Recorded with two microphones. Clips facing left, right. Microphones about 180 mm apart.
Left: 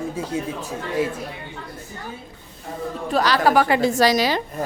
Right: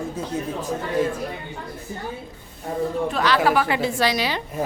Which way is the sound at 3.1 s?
40° left (ahead or behind).